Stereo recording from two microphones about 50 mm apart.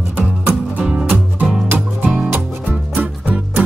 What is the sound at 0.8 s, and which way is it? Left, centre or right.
Music, centre.